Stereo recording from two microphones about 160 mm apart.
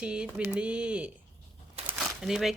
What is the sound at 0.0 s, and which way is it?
Speech, 5° right (ahead or behind).